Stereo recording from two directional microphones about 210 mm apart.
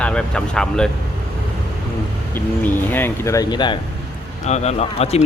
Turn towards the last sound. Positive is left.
turn(degrees=30)  # may be behind; listen again after turning